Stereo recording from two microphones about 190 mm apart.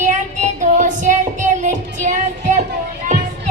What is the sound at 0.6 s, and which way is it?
Music, 40° right (ahead or behind).